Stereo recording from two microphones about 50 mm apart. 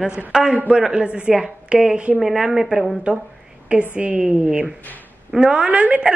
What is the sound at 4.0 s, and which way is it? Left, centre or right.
A woman's voice, right.